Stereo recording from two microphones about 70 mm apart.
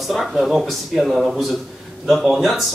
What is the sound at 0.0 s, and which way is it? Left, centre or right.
Speech, centre.